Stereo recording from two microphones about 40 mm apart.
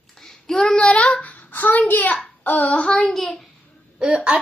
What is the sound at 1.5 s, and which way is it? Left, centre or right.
Speech, left.